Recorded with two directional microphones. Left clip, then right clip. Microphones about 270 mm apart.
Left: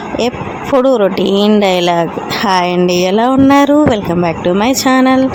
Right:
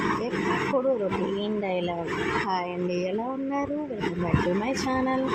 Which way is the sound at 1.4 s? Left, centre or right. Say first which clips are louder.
Left 18 dB; left.